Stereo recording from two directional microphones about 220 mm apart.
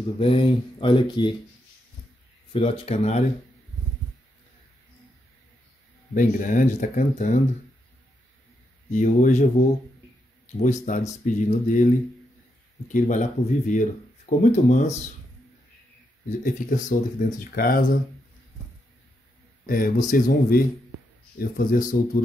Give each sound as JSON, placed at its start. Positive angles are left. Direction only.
{"t": 0.2, "sound": "speech", "side_deg": 25}
{"t": 2.5, "sound": "speech", "side_deg": 25}
{"t": 6.1, "sound": "speech", "side_deg": 35}
{"t": 8.9, "sound": "speech", "side_deg": 35}
{"t": 12.9, "sound": "speech", "side_deg": 35}
{"t": 16.3, "sound": "speech", "side_deg": 35}
{"t": 19.6, "sound": "speech", "side_deg": 40}